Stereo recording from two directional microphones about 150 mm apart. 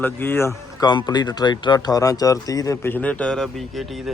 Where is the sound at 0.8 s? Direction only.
30° left (ahead or behind).